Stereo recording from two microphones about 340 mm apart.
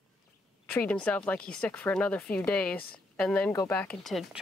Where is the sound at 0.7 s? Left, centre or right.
Centre.